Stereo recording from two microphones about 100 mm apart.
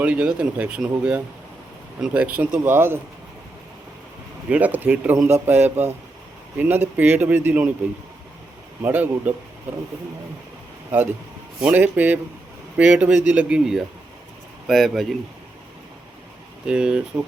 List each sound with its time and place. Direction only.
0.0 s speech: 10° right (ahead or behind)
4.4 s a man's voice: 15° right (ahead or behind)
8.8 s speech: 20° right (ahead or behind)
11.6 s speech: 15° right (ahead or behind)
13.6 s speech: 5° right (ahead or behind)
16.6 s speech: 10° right (ahead or behind)